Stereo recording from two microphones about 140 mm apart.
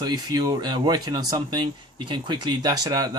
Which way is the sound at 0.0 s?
30° right (ahead or behind).